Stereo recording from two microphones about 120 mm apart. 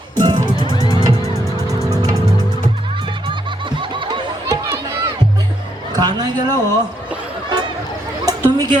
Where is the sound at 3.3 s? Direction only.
45° right (ahead or behind).